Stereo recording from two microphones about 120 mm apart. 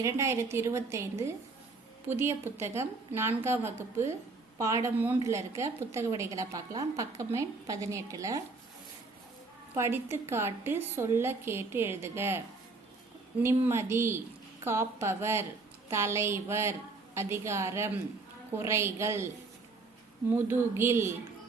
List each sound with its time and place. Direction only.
0.0 s a woman's voice: 25° right (ahead or behind)
9.7 s a woman's voice: 20° right (ahead or behind)
13.4 s a woman's voice: 20° right (ahead or behind)
20.3 s a woman's voice: 20° right (ahead or behind)